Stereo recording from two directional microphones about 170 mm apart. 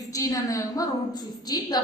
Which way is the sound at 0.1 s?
20° left (ahead or behind).